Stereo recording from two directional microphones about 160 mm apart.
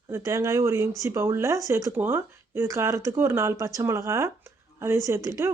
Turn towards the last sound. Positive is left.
turn(degrees=-20)  # may be behind; listen again after turning